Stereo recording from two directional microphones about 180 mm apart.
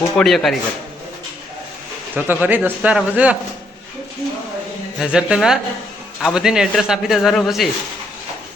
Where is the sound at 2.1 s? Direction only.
10° right (ahead or behind).